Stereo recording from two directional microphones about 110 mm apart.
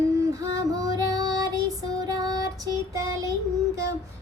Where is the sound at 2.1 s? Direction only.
35° right (ahead or behind).